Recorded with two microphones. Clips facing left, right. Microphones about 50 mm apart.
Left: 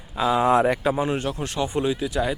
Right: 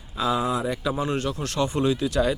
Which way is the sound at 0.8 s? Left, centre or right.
Left.